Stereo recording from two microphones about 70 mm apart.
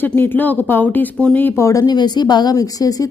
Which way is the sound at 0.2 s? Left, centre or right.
Left.